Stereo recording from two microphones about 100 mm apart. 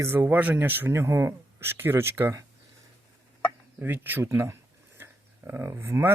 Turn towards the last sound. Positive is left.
turn(degrees=-25)  # may be behind; listen again after turning